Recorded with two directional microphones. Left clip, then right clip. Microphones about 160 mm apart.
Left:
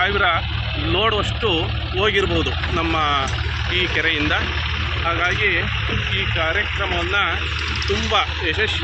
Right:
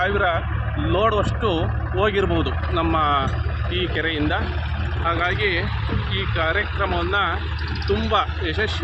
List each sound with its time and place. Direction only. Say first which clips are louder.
0.0 s speech: left 2 dB; 75° right (ahead or behind)
0.9 s speech: even; 90° right; by 3.2 s 60° right (ahead or behind)
3.7 s speech: left 4 dB; 45° right (ahead or behind)
5.0 s speech: left 2 dB; 20° right (ahead or behind)
7.9 s speech: even; 65° right (ahead or behind); by 8.7 s 80° right